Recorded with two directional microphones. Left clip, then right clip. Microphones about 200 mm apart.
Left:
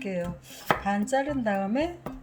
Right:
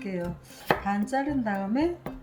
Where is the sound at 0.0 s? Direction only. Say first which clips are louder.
Left 2 dB; 30° left (ahead or behind).